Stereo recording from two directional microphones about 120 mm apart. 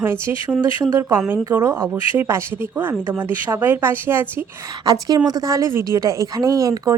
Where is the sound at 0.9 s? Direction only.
25° right (ahead or behind).